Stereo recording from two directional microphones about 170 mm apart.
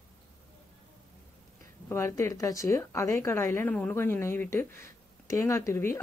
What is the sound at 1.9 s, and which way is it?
Speech, 15° left (ahead or behind).